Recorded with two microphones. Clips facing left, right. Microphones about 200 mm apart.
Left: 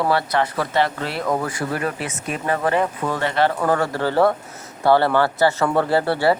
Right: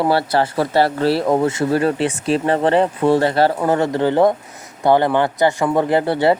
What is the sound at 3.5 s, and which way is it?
A man's voice, 20° right (ahead or behind).